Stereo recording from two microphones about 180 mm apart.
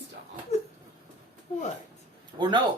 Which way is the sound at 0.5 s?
35° left (ahead or behind).